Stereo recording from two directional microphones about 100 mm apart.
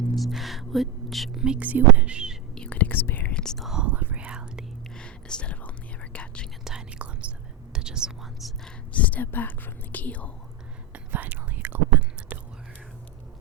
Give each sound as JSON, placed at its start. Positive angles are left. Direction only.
{"t": 0.2, "sound": "speech", "side_deg": 0}
{"t": 2.6, "sound": "speech", "side_deg": 15}
{"t": 4.9, "sound": "speech", "side_deg": 10}
{"t": 6.7, "sound": "speech", "side_deg": -10}
{"t": 8.9, "sound": "speech", "side_deg": 15}
{"t": 10.9, "sound": "whispering", "side_deg": -20}